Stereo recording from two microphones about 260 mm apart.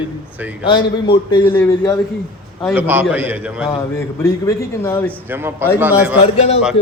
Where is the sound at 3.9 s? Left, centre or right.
Centre.